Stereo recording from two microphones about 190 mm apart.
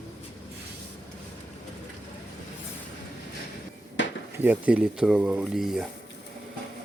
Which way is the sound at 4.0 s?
70° left (ahead or behind).